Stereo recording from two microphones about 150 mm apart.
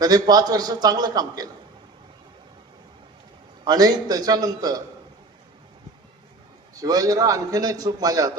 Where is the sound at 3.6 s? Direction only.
25° right (ahead or behind).